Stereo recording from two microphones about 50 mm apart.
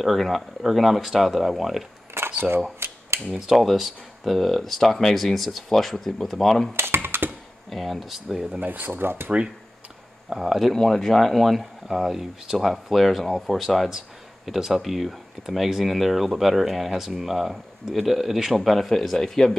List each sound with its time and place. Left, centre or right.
0.0 s speech: centre
2.2 s camera: right
2.8 s a sound: right
3.5 s speech: centre
6.8 s speech: right
7.2 s speech: centre
8.5 s speech: right
10.3 s speech: centre
10.7 s speech: centre